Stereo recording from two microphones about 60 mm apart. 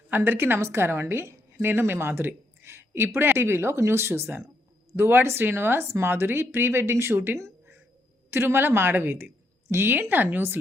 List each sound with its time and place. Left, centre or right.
0.3 s speech: right